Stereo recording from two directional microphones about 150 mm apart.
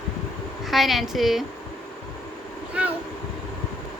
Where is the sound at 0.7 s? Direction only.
Centre (ahead or behind).